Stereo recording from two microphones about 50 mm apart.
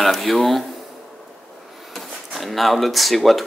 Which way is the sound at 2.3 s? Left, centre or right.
Centre.